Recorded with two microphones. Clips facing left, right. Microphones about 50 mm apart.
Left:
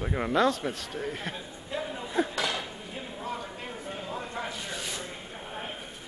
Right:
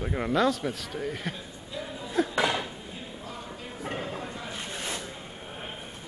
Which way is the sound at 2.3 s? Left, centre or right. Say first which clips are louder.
Right 4 dB; centre.